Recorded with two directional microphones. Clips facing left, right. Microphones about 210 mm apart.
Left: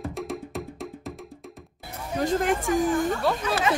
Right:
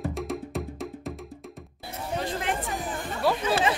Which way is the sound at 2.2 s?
45° left (ahead or behind).